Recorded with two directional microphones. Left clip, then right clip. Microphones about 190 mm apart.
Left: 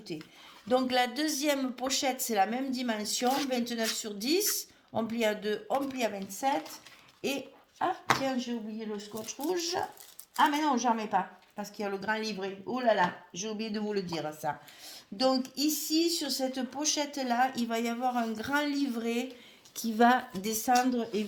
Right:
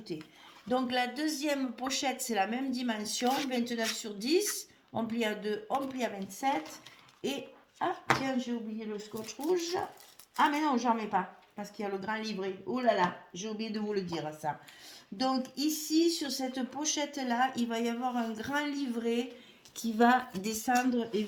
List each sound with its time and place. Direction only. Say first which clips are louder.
0.1 s a woman's voice: even; 45° left (ahead or behind)
7.2 s dog: left 2 dB; 40° left (ahead or behind)
8.4 s a woman's voice: even; 40° left (ahead or behind)